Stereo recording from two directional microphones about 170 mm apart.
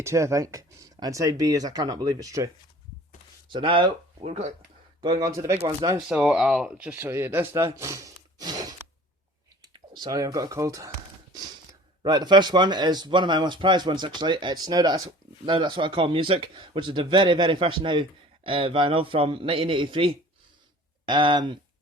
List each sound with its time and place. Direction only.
0.0 s speech: 15° right (ahead or behind)
3.5 s speech: 30° right (ahead or behind)
4.9 s speech: 25° right (ahead or behind)
6.1 s speech: 5° right (ahead or behind); by 8.7 s 20° right (ahead or behind)
9.7 s speech: 25° right (ahead or behind)
12.0 s speech: 25° right (ahead or behind)